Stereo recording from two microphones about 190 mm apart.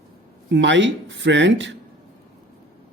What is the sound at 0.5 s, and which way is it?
Speech, 70° right (ahead or behind).